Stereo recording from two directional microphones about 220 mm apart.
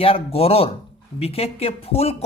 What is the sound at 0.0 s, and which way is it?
Speech, 25° left (ahead or behind).